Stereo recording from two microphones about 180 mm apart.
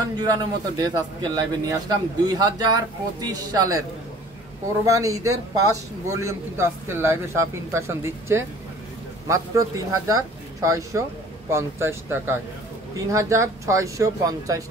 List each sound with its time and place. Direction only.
0.2 s a man's voice: 20° right (ahead or behind)
4.8 s a man's voice: 20° right (ahead or behind)